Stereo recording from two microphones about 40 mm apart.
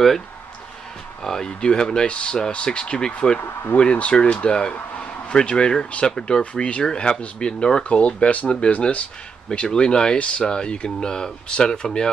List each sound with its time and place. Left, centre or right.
1.2 s speech: centre; by 3.3 s left
3.3 s speech: left
4.1 s speech: left
6.4 s speech: left
8.0 s speech: left
10.1 s speech: left